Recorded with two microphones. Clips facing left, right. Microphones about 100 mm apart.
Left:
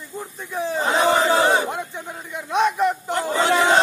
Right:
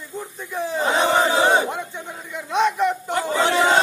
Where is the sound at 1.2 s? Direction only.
20° right (ahead or behind).